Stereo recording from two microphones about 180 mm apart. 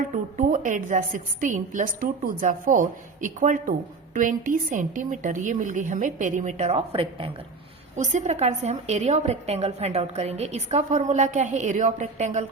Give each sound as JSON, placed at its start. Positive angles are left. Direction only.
{"t": 0.3, "sound": "a woman's voice", "side_deg": -45}